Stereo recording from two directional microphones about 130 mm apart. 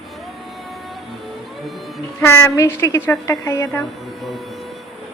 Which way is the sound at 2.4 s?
20° left (ahead or behind).